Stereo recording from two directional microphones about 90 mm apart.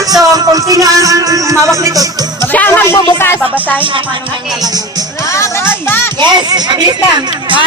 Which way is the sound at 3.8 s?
70° right (ahead or behind).